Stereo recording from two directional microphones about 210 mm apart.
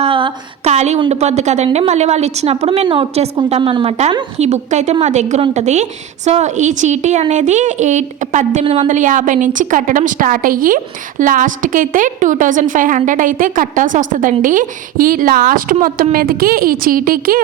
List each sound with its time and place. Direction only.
0.0 s a woman's voice: 25° right (ahead or behind); by 17.4 s 45° right (ahead or behind)